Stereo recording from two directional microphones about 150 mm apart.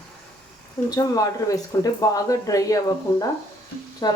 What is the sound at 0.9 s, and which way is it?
Speech, 25° left (ahead or behind).